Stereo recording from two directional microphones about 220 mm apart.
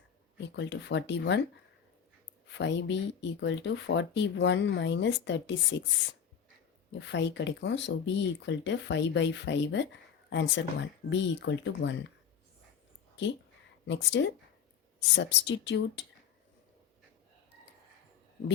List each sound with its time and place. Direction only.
0.3 s speech: 55° left (ahead or behind)
2.5 s speech: 55° left (ahead or behind)
7.0 s speech: 55° left (ahead or behind)
13.8 s speech: 55° left (ahead or behind)